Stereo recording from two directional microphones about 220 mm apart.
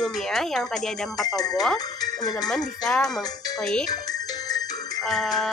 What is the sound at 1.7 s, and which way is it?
Speech, 15° left (ahead or behind).